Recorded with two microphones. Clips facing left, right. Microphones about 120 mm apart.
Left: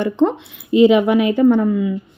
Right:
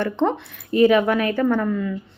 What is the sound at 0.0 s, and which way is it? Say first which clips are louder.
Speech: left 4 dB; 15° left (ahead or behind).